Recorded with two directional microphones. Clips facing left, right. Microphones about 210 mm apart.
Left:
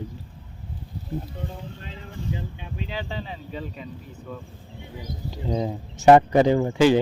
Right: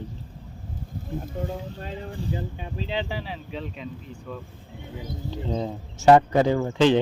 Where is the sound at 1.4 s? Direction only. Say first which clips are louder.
Right 5 dB; 45° right (ahead or behind); by 3.0 s 30° right (ahead or behind).